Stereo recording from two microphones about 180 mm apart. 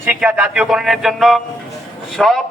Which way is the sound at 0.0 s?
10° right (ahead or behind).